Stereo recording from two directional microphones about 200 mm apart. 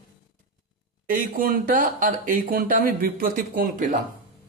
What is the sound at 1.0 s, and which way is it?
Speech, 45° right (ahead or behind).